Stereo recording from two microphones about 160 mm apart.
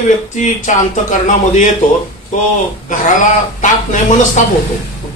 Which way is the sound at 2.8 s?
55° left (ahead or behind).